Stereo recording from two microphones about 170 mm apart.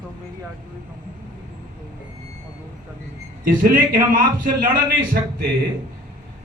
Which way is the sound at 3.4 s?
55° right (ahead or behind).